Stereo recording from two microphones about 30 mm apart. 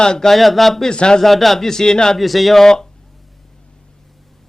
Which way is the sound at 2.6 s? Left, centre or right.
Left.